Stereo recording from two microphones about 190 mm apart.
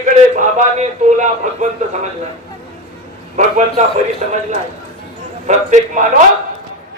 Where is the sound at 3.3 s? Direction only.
40° right (ahead or behind).